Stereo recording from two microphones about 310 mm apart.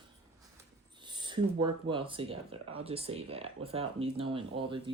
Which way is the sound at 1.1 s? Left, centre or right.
Centre.